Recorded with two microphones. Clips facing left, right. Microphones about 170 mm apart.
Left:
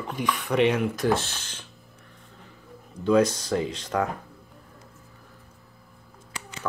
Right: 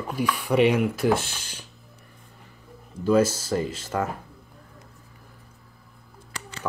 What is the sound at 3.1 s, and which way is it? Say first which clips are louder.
Speech: even; 5° right (ahead or behind).